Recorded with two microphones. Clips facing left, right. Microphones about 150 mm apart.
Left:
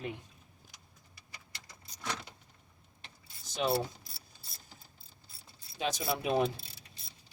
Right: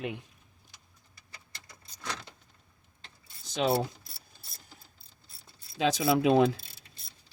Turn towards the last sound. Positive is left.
turn(degrees=-90)